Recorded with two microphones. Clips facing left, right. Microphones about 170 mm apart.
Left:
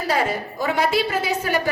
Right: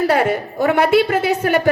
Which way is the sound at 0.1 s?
60° right (ahead or behind).